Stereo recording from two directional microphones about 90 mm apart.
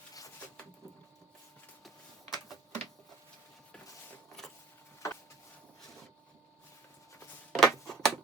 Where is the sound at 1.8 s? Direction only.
Centre (ahead or behind).